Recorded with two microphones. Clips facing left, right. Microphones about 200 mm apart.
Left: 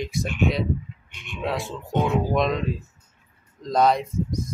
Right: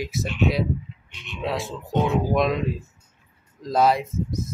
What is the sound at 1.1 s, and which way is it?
Speech, 50° left (ahead or behind).